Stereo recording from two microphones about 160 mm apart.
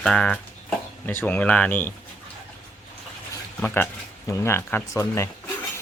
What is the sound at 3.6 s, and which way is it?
Speech, 15° left (ahead or behind).